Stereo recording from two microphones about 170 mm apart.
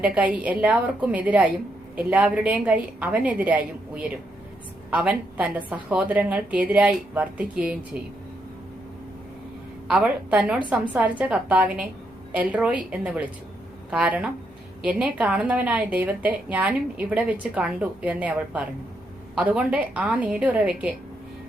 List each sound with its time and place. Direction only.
0.0 s a woman's voice: 10° right (ahead or behind)
9.9 s a woman's voice: 10° right (ahead or behind)